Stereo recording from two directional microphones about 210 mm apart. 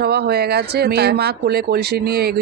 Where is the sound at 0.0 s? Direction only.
50° right (ahead or behind).